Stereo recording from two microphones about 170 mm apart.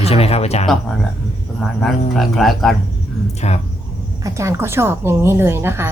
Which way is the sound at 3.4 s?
40° left (ahead or behind).